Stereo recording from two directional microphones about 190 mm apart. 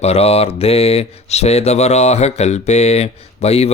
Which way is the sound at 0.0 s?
35° left (ahead or behind).